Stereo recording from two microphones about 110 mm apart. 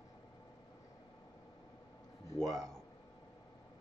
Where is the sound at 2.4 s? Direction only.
5° left (ahead or behind).